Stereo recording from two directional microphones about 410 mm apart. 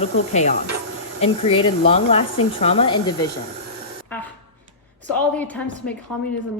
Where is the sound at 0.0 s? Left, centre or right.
Centre.